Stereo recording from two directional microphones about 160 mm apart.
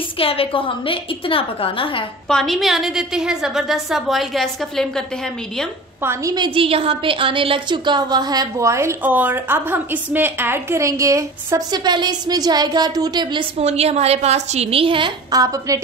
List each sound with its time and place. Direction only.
0.2 s a woman's voice: 35° left (ahead or behind)
2.2 s a woman's voice: centre (ahead or behind)
6.0 s a woman's voice: 25° right (ahead or behind)